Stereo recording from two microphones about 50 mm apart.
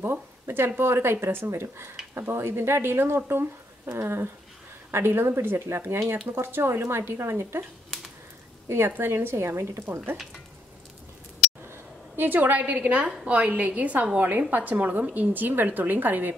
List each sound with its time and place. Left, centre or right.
0.0 s a woman's voice: right
5.7 s a woman's voice: right
8.6 s a woman's voice: right
9.8 s speech: right
12.2 s a woman's voice: right